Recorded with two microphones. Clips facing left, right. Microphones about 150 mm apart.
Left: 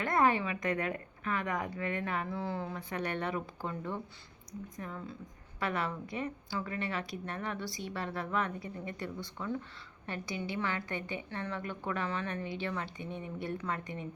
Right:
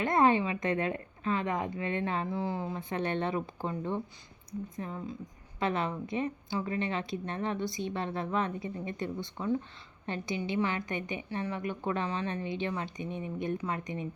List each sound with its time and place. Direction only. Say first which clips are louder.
0.0 s a woman's voice: right 3 dB; 20° right (ahead or behind)